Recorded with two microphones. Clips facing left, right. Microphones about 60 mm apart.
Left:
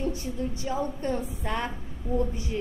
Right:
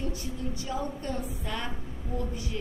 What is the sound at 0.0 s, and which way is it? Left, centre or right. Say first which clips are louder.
A woman's voice: left 4 dB; left.